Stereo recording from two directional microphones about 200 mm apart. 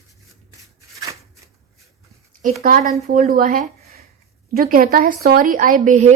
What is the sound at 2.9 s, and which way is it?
A woman's voice, 35° right (ahead or behind).